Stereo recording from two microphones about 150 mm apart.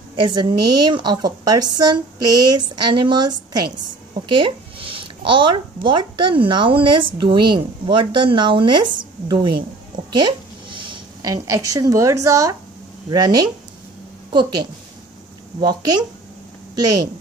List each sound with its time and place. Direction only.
0.1 s a woman's voice: 30° right (ahead or behind)
10.1 s a sound: 30° right (ahead or behind)
11.4 s a woman's voice: 20° right (ahead or behind)